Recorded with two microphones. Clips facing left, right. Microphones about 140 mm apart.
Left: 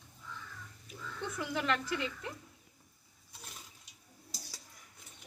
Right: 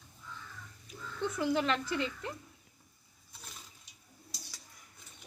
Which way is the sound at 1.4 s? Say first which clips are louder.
Right 5 dB; 25° right (ahead or behind).